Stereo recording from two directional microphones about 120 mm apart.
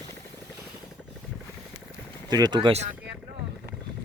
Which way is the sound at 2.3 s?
35° right (ahead or behind).